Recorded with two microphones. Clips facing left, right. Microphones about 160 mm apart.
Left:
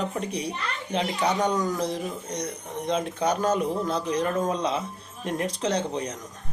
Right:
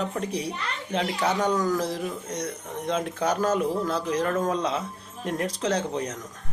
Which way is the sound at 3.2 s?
Centre (ahead or behind).